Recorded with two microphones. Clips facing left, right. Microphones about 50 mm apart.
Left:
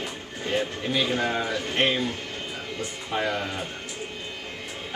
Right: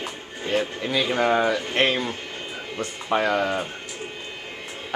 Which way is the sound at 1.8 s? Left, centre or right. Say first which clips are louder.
Left 1 dB; right.